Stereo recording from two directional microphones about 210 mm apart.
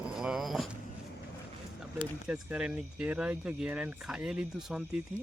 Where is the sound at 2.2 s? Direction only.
5° right (ahead or behind).